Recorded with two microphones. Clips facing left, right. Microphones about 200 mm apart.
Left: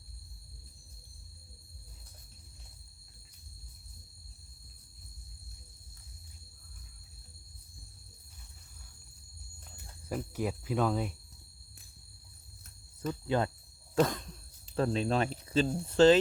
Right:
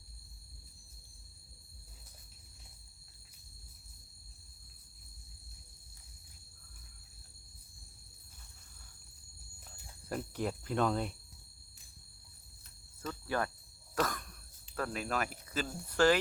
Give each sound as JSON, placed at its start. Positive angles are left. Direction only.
{"t": 10.1, "sound": "speech", "side_deg": 5}
{"t": 13.2, "sound": "speech", "side_deg": 20}
{"t": 13.9, "sound": "cough", "side_deg": 25}
{"t": 14.8, "sound": "speech", "side_deg": 25}